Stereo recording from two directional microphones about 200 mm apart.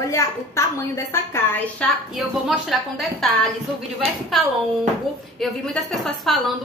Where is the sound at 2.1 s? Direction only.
Centre (ahead or behind).